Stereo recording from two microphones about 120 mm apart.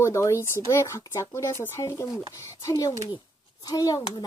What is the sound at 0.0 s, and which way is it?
Speech, 25° left (ahead or behind).